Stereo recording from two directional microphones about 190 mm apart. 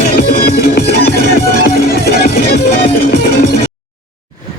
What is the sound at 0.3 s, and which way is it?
Music, 55° left (ahead or behind).